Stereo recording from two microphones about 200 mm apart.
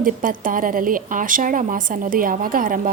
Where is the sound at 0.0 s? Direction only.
45° right (ahead or behind).